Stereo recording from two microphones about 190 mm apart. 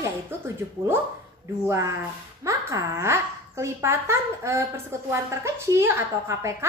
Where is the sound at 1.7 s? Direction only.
15° right (ahead or behind).